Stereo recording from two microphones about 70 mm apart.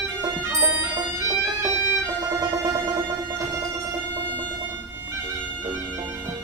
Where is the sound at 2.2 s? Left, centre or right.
Right.